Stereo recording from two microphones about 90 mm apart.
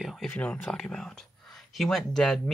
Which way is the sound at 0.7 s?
5° left (ahead or behind).